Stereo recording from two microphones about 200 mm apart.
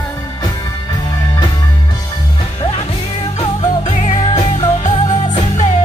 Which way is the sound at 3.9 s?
35° left (ahead or behind).